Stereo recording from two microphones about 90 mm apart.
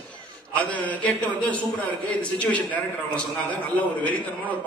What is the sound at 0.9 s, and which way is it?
A man's voice, 15° left (ahead or behind).